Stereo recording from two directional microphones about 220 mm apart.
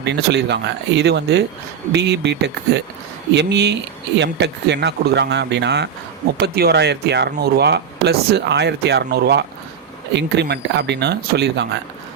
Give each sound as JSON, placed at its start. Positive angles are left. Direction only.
{"t": 0.0, "sound": "speech", "side_deg": -50}